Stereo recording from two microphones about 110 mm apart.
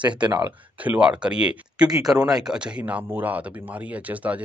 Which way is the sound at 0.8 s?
10° right (ahead or behind).